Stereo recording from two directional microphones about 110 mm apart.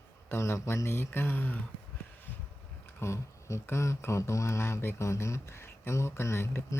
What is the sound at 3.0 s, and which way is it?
Speech, 25° left (ahead or behind).